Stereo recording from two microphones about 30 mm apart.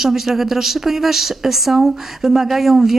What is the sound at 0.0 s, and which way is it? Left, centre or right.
Speech, centre.